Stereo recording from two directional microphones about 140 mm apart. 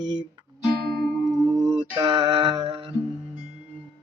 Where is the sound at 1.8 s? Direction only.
40° right (ahead or behind).